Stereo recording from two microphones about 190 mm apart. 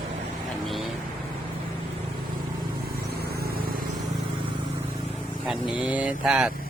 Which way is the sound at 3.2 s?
55° right (ahead or behind).